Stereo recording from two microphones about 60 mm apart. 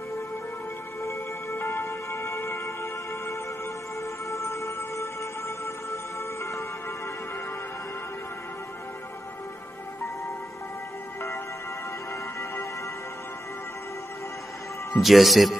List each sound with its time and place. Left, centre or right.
1.0 s music: left
15.0 s speech: centre